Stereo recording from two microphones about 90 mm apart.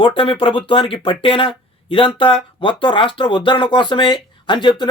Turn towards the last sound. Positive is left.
turn(degrees=60)  # may be behind; listen again after turning